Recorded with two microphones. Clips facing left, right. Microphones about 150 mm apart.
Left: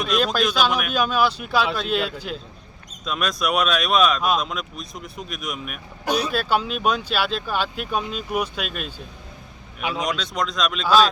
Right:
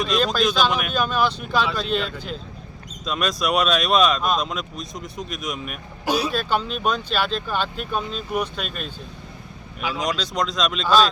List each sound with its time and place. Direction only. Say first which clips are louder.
0.0 s speech: right 1 dB; centre (ahead or behind)
6.3 s speech: left 1 dB; 5° left (ahead or behind)
10.0 s speech: right 2 dB; centre (ahead or behind)